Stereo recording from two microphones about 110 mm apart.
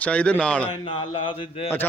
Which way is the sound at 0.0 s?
10° left (ahead or behind).